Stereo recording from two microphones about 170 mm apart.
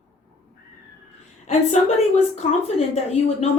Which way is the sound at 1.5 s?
40° left (ahead or behind).